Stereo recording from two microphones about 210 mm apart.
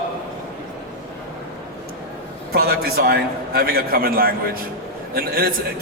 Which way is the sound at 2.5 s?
45° right (ahead or behind).